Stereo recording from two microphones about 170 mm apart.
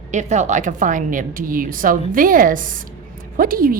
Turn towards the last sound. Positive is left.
turn(degrees=-55)  # may be behind; listen again after turning